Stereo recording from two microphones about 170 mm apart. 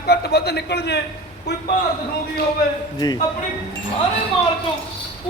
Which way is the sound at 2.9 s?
25° left (ahead or behind).